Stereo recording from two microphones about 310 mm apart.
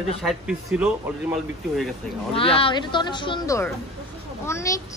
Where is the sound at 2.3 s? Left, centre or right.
Centre.